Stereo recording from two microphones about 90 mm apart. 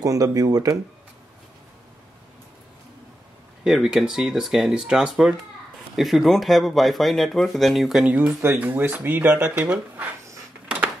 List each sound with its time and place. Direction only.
0.0 s speech: 40° right (ahead or behind)
3.6 s speech: 5° right (ahead or behind)
8.4 s speech: 25° right (ahead or behind)